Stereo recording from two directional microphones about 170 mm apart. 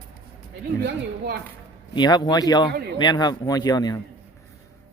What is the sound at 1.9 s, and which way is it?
Speech, 25° left (ahead or behind).